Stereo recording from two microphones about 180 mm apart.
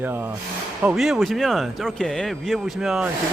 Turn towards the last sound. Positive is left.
turn(degrees=-5)  # may be behind; listen again after turning